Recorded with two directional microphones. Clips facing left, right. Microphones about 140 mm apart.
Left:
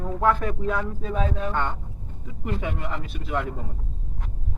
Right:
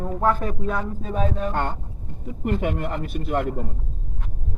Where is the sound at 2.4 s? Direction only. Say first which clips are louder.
Right 5 dB; 55° right (ahead or behind).